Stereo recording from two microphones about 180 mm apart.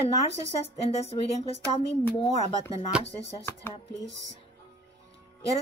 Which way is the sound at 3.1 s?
30° left (ahead or behind).